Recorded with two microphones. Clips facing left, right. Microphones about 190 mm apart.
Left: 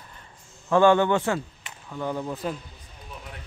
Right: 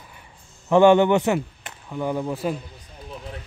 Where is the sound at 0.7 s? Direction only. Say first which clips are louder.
Right 4 dB; 20° right (ahead or behind).